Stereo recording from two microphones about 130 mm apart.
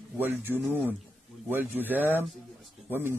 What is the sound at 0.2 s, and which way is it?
Speech, 15° right (ahead or behind).